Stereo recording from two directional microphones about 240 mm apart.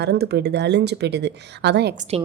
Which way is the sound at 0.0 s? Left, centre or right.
Right.